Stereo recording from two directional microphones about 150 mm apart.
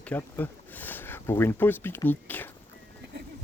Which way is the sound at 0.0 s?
10° left (ahead or behind).